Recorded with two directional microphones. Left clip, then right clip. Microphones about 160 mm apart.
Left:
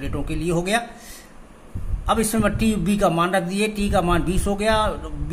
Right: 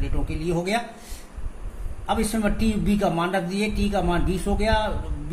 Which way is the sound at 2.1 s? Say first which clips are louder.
Left 4 dB; 35° left (ahead or behind).